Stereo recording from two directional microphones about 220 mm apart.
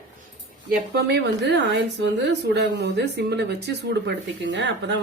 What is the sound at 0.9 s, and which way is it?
Speech, 50° right (ahead or behind).